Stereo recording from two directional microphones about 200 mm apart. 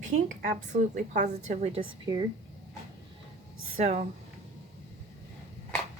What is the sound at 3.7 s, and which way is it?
Speech, 35° right (ahead or behind).